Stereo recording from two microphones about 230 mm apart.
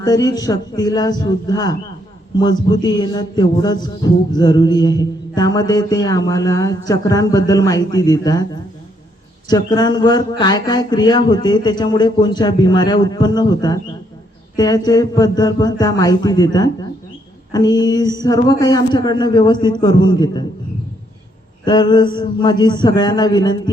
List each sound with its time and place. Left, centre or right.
0.0 s music: centre
9.5 s speech: centre
14.5 s music: centre
21.6 s speech: left